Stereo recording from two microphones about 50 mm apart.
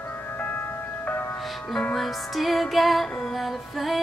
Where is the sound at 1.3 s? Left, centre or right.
Centre.